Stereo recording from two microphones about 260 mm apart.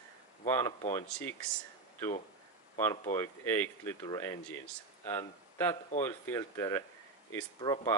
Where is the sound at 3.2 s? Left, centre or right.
Centre.